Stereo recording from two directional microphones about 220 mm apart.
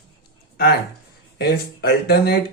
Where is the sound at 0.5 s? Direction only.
45° left (ahead or behind).